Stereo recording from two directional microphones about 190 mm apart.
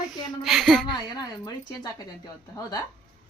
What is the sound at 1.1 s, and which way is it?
Speech, 20° left (ahead or behind).